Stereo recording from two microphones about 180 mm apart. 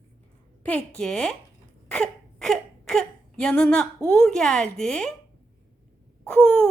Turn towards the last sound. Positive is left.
turn(degrees=5)  # may be behind; listen again after turning